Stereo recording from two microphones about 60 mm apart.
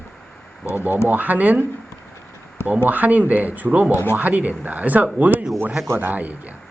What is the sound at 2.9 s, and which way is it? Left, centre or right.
Speech, right.